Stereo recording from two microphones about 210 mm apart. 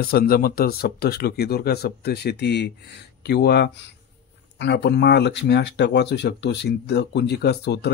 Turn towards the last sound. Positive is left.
turn(degrees=50)  # may be behind; listen again after turning